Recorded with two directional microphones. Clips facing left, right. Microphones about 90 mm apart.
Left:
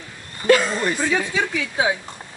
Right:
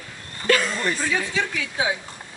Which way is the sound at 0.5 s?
20° left (ahead or behind).